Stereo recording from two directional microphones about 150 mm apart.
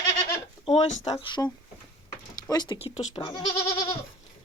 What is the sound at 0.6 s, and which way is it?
Speech, 45° left (ahead or behind).